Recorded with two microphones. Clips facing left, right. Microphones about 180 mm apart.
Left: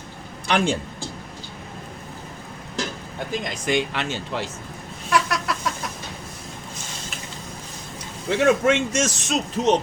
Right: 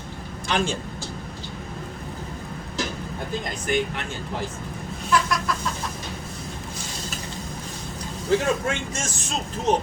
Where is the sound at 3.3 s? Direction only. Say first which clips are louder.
Left 2 dB; 85° left.